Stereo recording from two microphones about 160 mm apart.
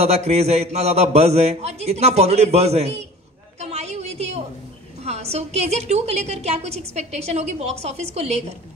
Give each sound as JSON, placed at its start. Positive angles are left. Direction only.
{"t": 0.0, "sound": "a woman's voice", "side_deg": -40}
{"t": 3.5, "sound": "a sound", "side_deg": -40}
{"t": 5.0, "sound": "a woman's voice", "side_deg": -40}